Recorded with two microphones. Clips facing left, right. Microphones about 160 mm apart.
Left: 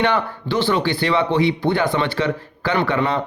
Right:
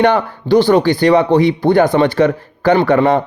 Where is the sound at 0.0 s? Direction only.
45° right (ahead or behind).